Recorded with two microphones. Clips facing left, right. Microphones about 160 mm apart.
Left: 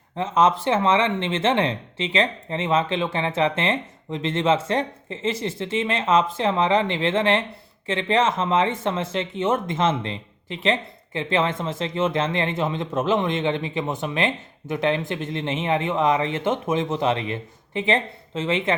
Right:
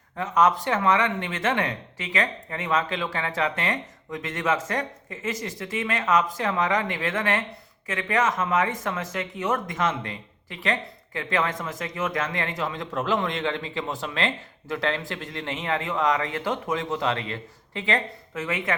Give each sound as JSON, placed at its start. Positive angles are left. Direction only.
{"t": 0.2, "sound": "speech", "side_deg": 25}